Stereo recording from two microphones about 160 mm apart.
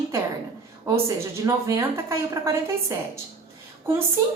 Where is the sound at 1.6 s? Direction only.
20° right (ahead or behind).